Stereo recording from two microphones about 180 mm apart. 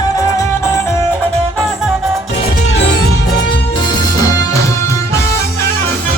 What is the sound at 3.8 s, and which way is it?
Music, 20° left (ahead or behind).